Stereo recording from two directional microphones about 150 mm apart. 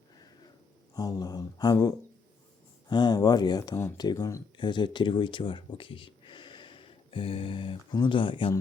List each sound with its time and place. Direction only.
0.9 s speech: 25° left (ahead or behind)
2.9 s speech: 30° left (ahead or behind)